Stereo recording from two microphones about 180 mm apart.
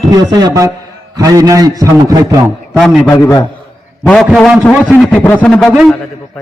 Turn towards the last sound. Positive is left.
turn(degrees=0)  # may be behind; listen again after turning